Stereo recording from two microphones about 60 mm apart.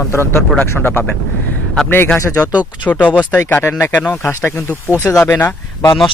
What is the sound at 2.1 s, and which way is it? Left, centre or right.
Speech, left.